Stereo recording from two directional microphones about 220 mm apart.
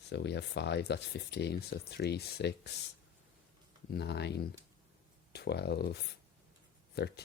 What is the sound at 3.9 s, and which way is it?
Speech, 50° left (ahead or behind).